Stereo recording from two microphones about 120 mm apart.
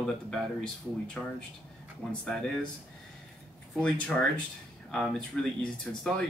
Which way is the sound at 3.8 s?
10° left (ahead or behind).